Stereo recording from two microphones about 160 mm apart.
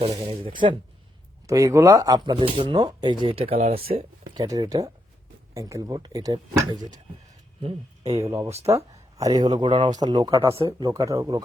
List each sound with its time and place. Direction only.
0.1 s speech: 30° right (ahead or behind)
1.5 s speech: 20° right (ahead or behind); by 4.0 s 35° right (ahead or behind)
4.4 s speech: 25° right (ahead or behind)
7.6 s speech: 45° right (ahead or behind)
8.2 s speech: 20° right (ahead or behind)
8.4 s speech: 40° right (ahead or behind)
8.7 s speech: 20° right (ahead or behind)